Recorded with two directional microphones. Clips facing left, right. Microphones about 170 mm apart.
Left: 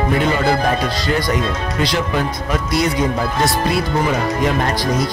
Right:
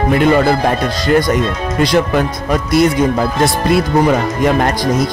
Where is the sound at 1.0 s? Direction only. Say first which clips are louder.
Right 6 dB; 50° right (ahead or behind).